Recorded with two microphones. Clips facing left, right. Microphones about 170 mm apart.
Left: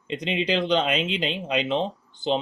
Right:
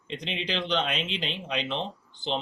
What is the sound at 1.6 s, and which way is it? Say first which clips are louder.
Speech: left 7 dB; 45° left (ahead or behind).